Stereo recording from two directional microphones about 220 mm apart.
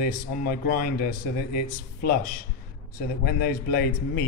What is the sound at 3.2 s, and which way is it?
Speech, 45° left (ahead or behind).